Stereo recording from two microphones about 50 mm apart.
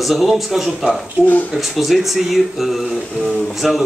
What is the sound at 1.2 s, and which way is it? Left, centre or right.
Speech, left.